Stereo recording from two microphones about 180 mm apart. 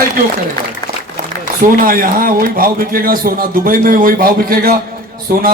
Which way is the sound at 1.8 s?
50° right (ahead or behind).